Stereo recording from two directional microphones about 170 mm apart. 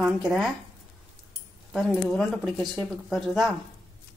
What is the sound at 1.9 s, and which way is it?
A woman's voice, 5° left (ahead or behind).